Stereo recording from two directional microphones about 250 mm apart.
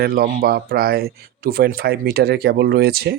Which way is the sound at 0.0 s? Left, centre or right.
Right.